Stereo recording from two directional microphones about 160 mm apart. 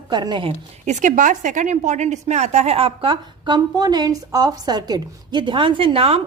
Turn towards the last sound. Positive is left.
turn(degrees=-35)  # may be behind; listen again after turning